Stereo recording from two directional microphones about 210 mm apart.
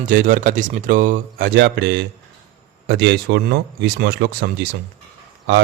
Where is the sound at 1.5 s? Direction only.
55° right (ahead or behind).